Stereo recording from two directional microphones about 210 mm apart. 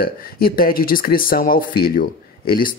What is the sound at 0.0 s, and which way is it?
Speech, 45° left (ahead or behind).